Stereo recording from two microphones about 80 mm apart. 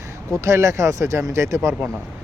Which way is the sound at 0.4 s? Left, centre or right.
Right.